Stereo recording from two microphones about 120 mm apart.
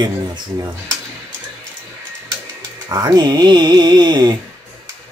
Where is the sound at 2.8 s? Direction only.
30° right (ahead or behind).